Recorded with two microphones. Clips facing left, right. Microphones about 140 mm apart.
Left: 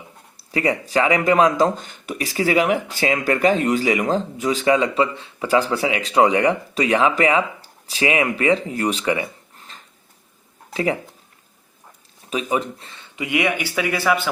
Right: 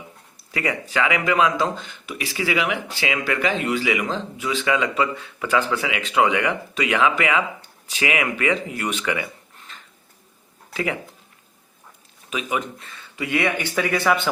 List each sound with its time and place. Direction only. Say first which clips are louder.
0.3 s speech: left 5 dB; 35° left (ahead or behind)
12.3 s speech: left 4 dB; 35° left (ahead or behind); by 14.2 s 5° left (ahead or behind)